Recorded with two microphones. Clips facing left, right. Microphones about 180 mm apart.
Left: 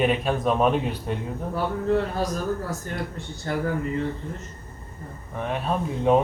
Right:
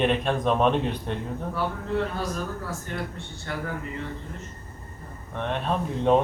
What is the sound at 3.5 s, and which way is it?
Speech, 35° left (ahead or behind).